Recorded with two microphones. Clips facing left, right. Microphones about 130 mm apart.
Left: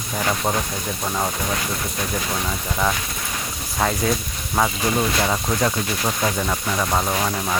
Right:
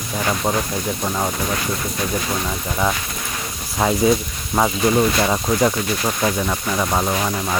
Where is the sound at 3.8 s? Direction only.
15° right (ahead or behind).